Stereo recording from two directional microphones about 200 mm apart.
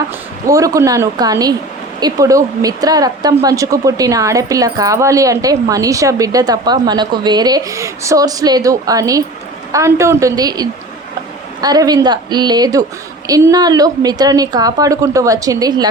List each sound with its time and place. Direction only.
0.4 s a woman's voice: 15° right (ahead or behind)